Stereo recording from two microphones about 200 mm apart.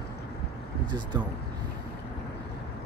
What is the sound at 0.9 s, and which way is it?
Speech, 20° right (ahead or behind).